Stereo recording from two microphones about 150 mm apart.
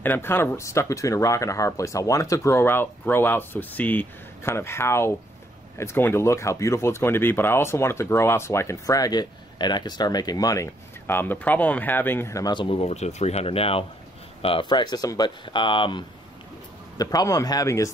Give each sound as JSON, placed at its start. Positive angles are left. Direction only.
{"t": 0.0, "sound": "speech", "side_deg": 15}
{"t": 17.0, "sound": "speech", "side_deg": 25}